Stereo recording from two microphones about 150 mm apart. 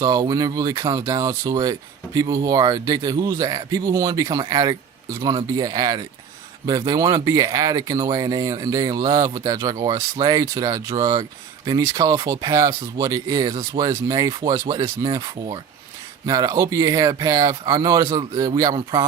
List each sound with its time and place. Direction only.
0.0 s speech: 25° right (ahead or behind)